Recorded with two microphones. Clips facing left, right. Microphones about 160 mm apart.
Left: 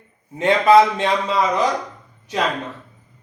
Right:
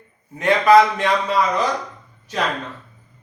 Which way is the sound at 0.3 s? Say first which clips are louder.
Even; 25° left (ahead or behind).